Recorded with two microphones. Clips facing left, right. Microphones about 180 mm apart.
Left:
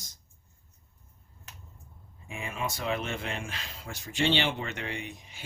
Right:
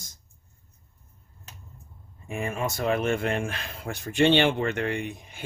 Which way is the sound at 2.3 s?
50° right (ahead or behind).